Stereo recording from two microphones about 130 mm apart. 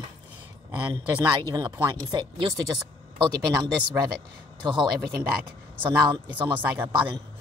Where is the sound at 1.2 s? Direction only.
35° right (ahead or behind).